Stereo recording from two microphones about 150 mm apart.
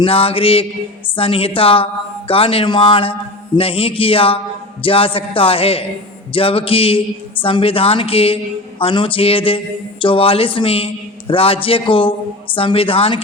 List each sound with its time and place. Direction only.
0.0 s speech: 40° left (ahead or behind)